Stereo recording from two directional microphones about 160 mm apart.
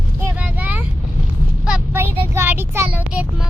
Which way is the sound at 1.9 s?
15° right (ahead or behind).